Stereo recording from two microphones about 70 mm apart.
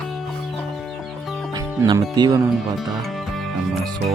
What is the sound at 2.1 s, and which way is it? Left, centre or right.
Speech, right.